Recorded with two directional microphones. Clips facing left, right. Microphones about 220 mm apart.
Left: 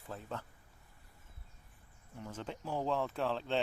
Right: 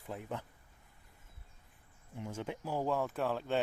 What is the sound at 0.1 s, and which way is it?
Speech, 15° right (ahead or behind).